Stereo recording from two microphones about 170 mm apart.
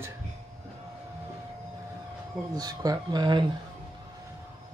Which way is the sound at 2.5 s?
20° right (ahead or behind).